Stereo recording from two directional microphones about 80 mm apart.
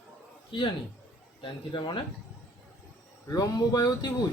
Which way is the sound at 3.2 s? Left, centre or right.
Left.